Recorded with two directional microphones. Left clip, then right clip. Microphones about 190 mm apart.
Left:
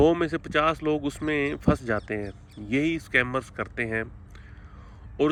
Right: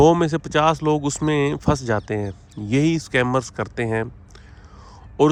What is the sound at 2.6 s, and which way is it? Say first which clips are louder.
Speech: right 8 dB; 90° left.